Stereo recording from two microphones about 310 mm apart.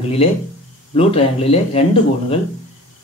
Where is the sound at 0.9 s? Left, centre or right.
Centre.